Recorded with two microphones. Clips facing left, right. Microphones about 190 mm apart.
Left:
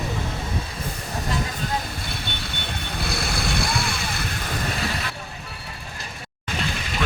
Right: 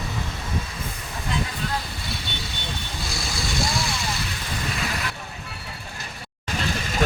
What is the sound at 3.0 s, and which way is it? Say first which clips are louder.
Vehicle: left 5 dB; 60° left (ahead or behind).